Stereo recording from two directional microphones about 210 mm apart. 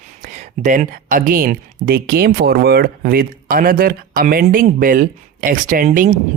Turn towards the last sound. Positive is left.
turn(degrees=-35)  # may be behind; listen again after turning